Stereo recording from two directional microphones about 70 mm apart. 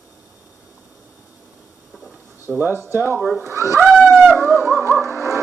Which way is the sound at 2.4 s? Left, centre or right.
Right.